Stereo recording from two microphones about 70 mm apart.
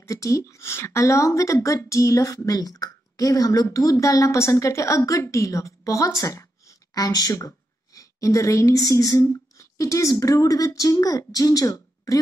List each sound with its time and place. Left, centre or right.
0.0 s speech: left
6.9 s a woman's voice: left